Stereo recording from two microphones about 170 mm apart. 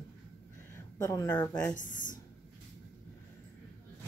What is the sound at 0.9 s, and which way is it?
Speech, 20° left (ahead or behind).